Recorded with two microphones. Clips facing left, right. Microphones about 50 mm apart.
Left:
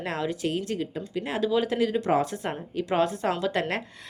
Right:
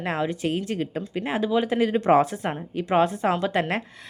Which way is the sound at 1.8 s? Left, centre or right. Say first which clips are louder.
Right 5 dB; right.